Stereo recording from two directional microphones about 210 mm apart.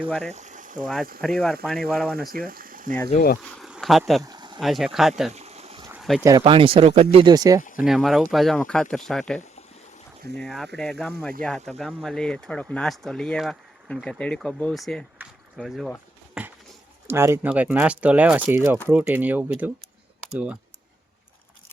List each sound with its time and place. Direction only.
0.3 s boiling: 35° right (ahead or behind)
1.2 s speech: centre (ahead or behind)
2.3 s speech: 45° right (ahead or behind)
3.1 s speech: 45° left (ahead or behind)
3.5 s a sound: centre (ahead or behind)
4.2 s a sound: 20° right (ahead or behind)
4.6 s speech: centre (ahead or behind)
5.3 s a sound: 30° right (ahead or behind)
6.0 s a sound: centre (ahead or behind)
6.2 s speech: 20° right (ahead or behind)
7.9 s speech: centre (ahead or behind)
10.4 s speech: centre (ahead or behind)